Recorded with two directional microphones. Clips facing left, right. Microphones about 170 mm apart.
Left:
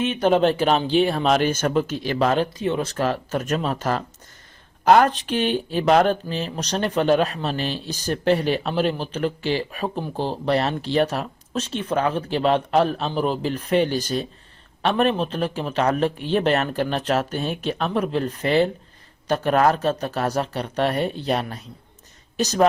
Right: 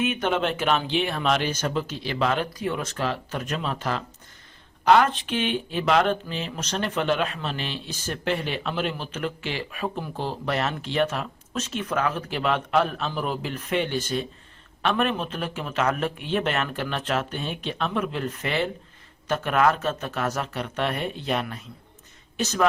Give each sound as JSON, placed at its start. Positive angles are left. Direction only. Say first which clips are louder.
{"t": 0.0, "sound": "speech", "louder": "left 6 dB", "side_deg": 30}
{"t": 2.5, "sound": "speech", "louder": "left 5 dB", "side_deg": 25}